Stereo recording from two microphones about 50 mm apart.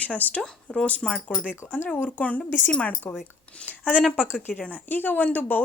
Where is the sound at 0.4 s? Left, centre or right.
Centre.